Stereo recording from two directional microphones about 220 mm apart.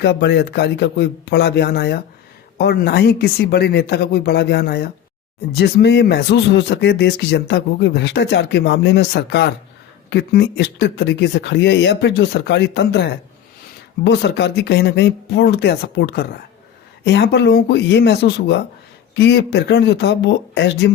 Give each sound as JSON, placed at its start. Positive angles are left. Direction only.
{"t": 0.0, "sound": "speech", "side_deg": 50}